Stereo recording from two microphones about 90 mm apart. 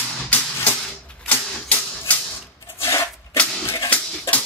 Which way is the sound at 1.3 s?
20° left (ahead or behind).